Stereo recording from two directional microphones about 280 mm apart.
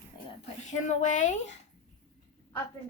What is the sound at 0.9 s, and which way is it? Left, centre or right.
Speech, left.